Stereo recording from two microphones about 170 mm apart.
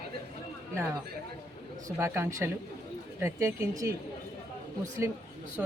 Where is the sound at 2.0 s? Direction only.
15° right (ahead or behind).